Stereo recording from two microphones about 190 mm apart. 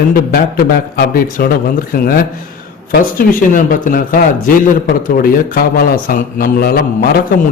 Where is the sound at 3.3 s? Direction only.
45° left (ahead or behind).